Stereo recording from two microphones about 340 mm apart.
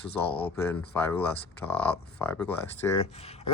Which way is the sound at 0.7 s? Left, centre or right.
Centre.